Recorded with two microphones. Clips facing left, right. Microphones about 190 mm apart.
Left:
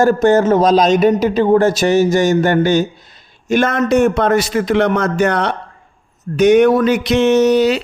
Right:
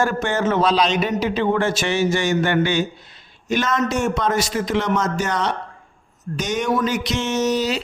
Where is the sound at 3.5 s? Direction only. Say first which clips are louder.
Left 7 dB; 55° left (ahead or behind).